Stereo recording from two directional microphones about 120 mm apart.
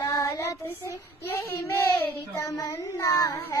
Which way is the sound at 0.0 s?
30° left (ahead or behind).